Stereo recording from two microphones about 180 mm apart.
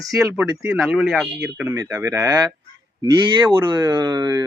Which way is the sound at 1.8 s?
15° right (ahead or behind).